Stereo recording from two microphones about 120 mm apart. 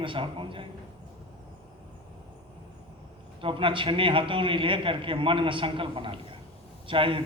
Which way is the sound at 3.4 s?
45° right (ahead or behind).